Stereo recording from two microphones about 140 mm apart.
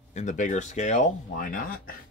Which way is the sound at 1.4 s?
90° left.